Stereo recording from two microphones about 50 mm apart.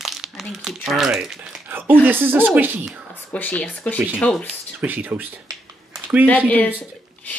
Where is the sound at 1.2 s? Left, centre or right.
Centre.